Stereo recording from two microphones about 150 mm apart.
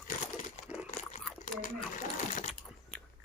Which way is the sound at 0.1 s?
55° left (ahead or behind).